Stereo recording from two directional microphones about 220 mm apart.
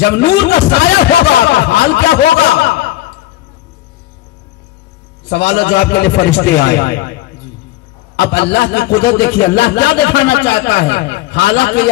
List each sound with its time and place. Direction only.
0.0 s speech: 50° left (ahead or behind)
2.6 s chuckle: 50° left (ahead or behind)
5.3 s speech: 50° left (ahead or behind)